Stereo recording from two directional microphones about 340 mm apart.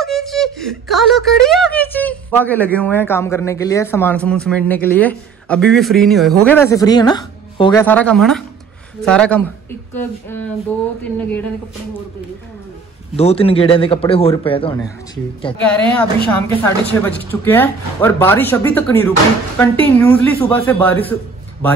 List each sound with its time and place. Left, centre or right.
0.0 s speech: centre
13.1 s speech: centre
15.6 s speech: centre